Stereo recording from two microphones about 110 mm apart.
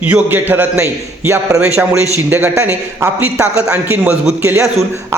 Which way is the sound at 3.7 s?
15° right (ahead or behind).